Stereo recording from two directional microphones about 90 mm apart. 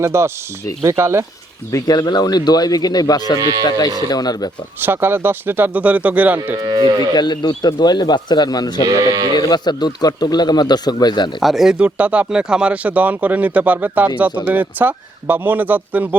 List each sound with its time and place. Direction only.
0.0 s speech: 30° right (ahead or behind)
1.7 s a man's voice: 45° left (ahead or behind)
4.8 s speech: 25° right (ahead or behind)
6.6 s speech: 50° right (ahead or behind)
7.1 s a man's voice: 50° left (ahead or behind)
8.9 s speech: 40° right (ahead or behind)
9.4 s a man's voice: 50° left (ahead or behind)
11.3 s speech: centre (ahead or behind); by 16.0 s 20° right (ahead or behind)